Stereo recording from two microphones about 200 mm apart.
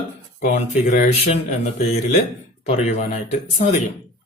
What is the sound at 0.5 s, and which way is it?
A man's voice, 35° left (ahead or behind).